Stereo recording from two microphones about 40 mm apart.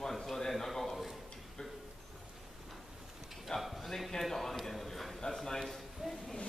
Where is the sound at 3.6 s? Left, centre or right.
Centre.